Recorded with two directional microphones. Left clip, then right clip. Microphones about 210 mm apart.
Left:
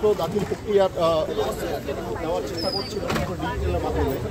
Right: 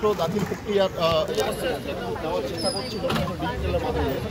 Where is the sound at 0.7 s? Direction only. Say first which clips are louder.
Left 2 dB; 50° left (ahead or behind).